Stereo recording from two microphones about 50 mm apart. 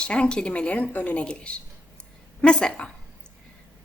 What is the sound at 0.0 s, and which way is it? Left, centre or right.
A woman's voice, left.